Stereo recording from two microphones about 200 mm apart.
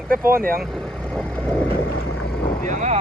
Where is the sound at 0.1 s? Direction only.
45° right (ahead or behind).